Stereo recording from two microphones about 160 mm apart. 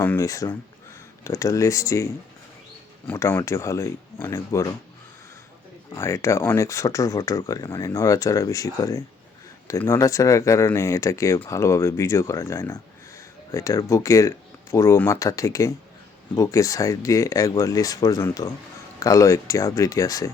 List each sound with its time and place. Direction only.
0.0 s speech: 15° left (ahead or behind)
3.1 s speech: 15° left (ahead or behind)
5.9 s speech: 20° left (ahead or behind)